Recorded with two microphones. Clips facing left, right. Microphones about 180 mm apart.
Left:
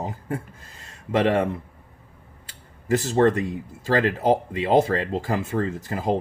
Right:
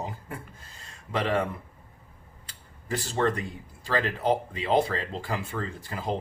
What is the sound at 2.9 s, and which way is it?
Speech, 40° left (ahead or behind).